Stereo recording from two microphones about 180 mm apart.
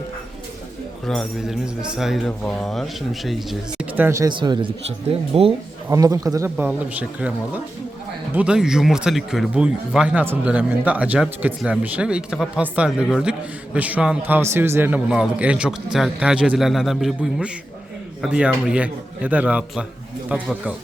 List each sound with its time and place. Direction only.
1.0 s speech: 5° left (ahead or behind); by 5.5 s 30° right (ahead or behind)
5.9 s a man's voice: 20° right (ahead or behind)